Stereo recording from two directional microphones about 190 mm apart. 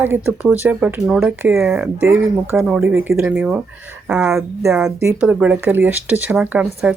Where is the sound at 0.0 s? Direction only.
10° right (ahead or behind).